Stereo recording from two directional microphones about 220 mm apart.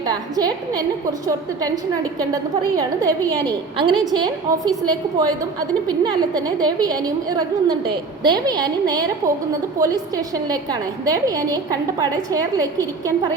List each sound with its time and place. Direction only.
0.0 s a woman's voice: 20° right (ahead or behind)
1.6 s a woman's voice: 15° right (ahead or behind)